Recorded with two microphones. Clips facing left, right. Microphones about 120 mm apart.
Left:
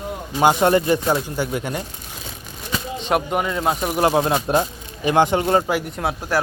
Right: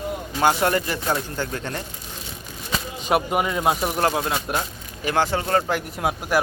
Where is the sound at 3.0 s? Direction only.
5° right (ahead or behind).